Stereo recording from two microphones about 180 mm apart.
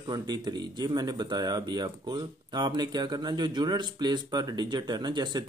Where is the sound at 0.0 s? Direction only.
25° right (ahead or behind).